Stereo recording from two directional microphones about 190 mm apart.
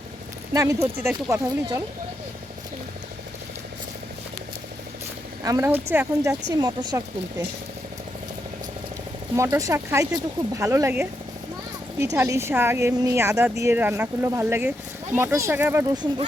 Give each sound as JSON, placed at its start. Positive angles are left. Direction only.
{"t": 0.5, "sound": "speech", "side_deg": -15}
{"t": 5.4, "sound": "speech", "side_deg": -15}
{"t": 6.5, "sound": "speech", "side_deg": -20}
{"t": 9.3, "sound": "speech", "side_deg": -15}
{"t": 12.1, "sound": "speech", "side_deg": -15}